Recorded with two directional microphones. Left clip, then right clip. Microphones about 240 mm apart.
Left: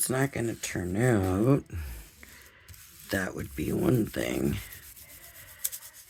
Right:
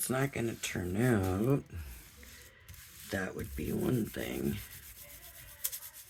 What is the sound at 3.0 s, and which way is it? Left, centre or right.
Speech, left.